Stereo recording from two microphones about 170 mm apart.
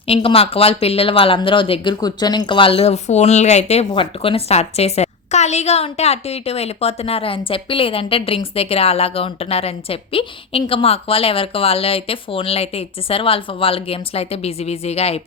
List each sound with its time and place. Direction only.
0.1 s speech: 35° left (ahead or behind)